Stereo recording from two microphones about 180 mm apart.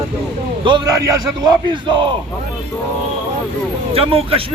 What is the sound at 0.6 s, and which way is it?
Speech, 25° right (ahead or behind).